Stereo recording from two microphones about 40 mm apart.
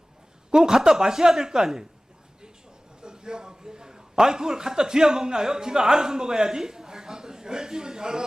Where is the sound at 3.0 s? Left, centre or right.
Centre.